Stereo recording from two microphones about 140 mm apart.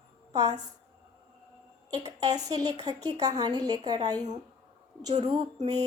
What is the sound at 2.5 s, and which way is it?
A woman's voice, 25° right (ahead or behind).